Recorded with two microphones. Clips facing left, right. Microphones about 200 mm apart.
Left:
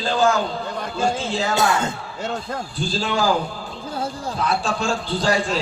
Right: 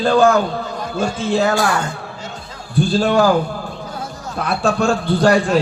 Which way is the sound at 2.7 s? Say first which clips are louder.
Right 10 dB; 60° right (ahead or behind).